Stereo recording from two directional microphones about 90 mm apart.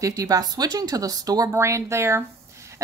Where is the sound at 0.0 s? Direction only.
40° right (ahead or behind).